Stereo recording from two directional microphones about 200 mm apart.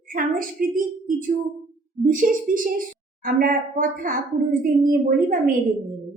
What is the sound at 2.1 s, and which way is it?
A woman's voice, 40° right (ahead or behind).